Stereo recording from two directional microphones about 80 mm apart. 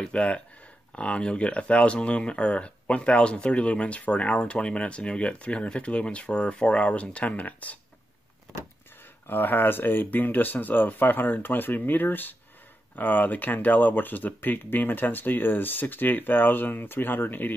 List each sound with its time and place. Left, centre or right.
0.0 s speech: centre
9.3 s speech: left